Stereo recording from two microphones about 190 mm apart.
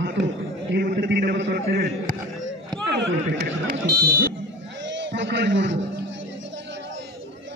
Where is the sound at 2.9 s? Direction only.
65° right (ahead or behind).